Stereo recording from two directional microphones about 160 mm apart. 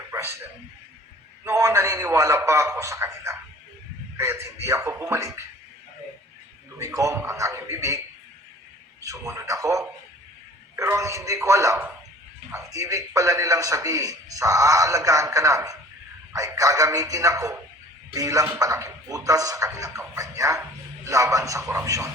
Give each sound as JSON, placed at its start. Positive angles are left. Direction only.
{"t": 0.1, "sound": "a sound", "side_deg": -15}
{"t": 1.5, "sound": "a man's voice", "side_deg": -15}
{"t": 6.7, "sound": "speech", "side_deg": -20}